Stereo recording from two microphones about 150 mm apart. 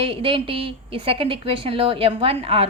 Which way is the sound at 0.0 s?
35° right (ahead or behind).